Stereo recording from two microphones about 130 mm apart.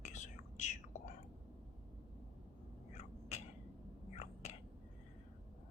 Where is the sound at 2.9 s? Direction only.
65° left (ahead or behind).